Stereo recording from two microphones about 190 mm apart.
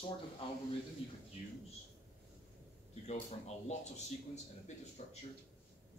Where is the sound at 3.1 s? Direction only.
35° left (ahead or behind).